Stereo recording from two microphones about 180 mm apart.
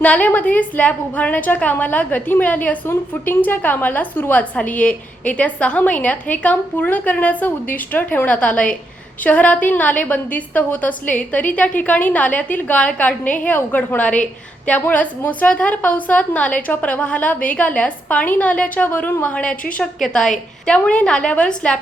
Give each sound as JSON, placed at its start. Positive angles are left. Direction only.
{"t": 0.0, "sound": "a woman's voice", "side_deg": 5}